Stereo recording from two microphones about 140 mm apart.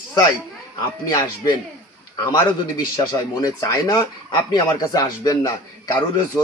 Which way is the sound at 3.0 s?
30° left (ahead or behind).